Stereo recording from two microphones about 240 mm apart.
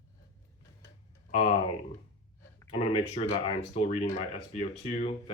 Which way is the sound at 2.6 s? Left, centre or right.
Left.